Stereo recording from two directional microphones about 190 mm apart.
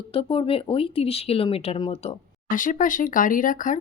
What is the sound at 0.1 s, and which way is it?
A woman's voice, 30° left (ahead or behind).